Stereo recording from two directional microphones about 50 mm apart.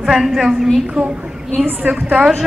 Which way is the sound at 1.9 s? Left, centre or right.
Right.